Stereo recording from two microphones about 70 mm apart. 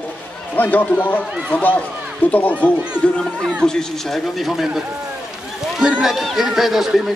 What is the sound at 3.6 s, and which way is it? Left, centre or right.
Speech, centre.